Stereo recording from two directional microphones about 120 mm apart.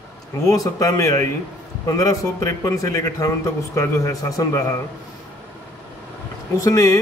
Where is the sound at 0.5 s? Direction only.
30° left (ahead or behind).